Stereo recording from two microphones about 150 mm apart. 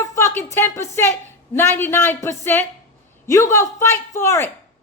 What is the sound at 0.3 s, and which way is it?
A woman's voice, 20° left (ahead or behind).